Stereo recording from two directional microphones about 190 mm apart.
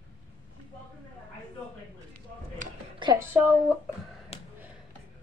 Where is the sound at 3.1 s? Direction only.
10° right (ahead or behind).